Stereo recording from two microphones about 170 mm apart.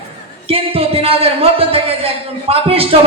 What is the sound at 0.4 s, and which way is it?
Music, 35° right (ahead or behind).